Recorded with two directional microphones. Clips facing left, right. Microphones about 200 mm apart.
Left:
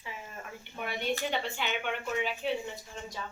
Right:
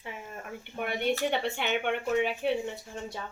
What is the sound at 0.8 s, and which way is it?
Speech, 60° right (ahead or behind).